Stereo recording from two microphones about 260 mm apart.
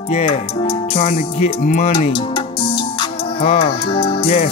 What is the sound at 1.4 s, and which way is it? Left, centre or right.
Music, left.